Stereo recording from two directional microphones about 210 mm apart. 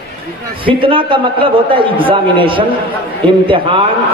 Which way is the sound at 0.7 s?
25° right (ahead or behind).